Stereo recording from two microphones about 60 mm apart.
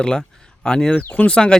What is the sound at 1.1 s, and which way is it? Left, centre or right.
Speech, left.